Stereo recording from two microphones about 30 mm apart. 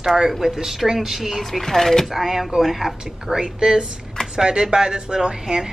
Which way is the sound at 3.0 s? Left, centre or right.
Right.